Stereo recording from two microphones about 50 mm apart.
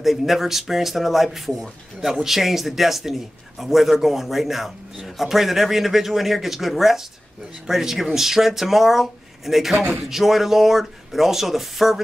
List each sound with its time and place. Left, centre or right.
0.0 s a man's voice: centre